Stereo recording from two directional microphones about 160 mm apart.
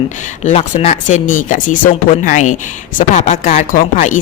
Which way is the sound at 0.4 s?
45° left (ahead or behind).